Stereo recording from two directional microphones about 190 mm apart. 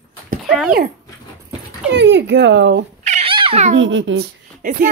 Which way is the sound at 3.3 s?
30° right (ahead or behind).